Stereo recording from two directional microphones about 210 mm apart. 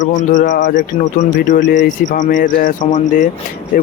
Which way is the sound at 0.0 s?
40° left (ahead or behind).